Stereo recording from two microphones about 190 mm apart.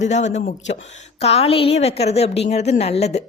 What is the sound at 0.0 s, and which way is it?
A woman's voice, 40° left (ahead or behind).